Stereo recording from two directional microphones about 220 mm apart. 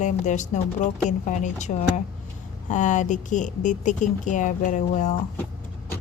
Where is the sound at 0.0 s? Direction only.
35° left (ahead or behind).